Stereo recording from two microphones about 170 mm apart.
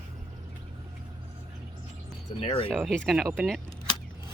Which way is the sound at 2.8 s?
Centre (ahead or behind).